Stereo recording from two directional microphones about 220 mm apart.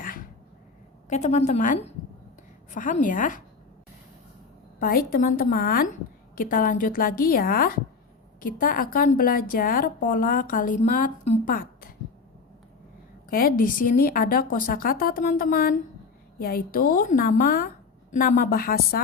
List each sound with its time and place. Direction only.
0.0 s a sound: 40° left (ahead or behind)
1.1 s a woman's voice: 30° left (ahead or behind)
4.8 s a woman's voice: 40° left (ahead or behind)
13.3 s a woman's voice: 40° left (ahead or behind)